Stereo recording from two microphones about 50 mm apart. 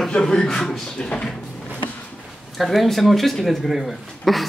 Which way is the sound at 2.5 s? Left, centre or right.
Centre.